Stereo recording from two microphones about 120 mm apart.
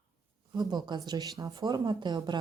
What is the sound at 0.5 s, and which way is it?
Speech, 35° right (ahead or behind).